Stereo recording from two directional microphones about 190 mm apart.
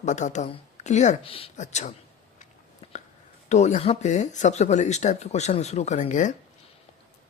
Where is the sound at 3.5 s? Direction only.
35° left (ahead or behind).